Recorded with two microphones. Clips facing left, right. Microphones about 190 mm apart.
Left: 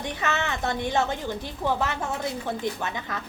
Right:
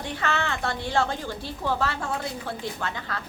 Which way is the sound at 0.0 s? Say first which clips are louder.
Even; 20° left (ahead or behind).